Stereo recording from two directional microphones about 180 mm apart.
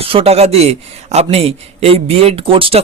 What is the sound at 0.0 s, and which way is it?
A man's voice, 30° right (ahead or behind).